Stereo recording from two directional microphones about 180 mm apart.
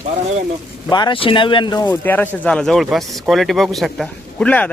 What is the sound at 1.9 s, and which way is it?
A man's voice, 10° left (ahead or behind).